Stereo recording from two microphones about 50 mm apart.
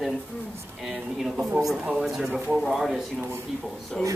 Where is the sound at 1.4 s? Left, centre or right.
Centre.